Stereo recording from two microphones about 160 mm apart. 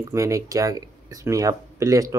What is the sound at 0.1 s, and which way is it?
Speech, 20° right (ahead or behind).